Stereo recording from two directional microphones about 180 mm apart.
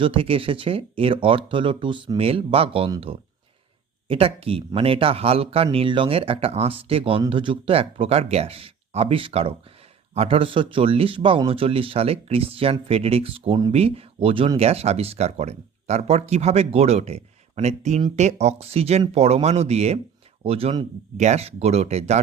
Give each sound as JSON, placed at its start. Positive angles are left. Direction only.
{"t": 0.0, "sound": "speech", "side_deg": -30}
{"t": 4.1, "sound": "speech", "side_deg": -30}